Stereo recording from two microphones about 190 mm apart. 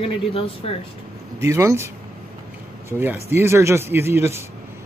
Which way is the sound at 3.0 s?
10° right (ahead or behind).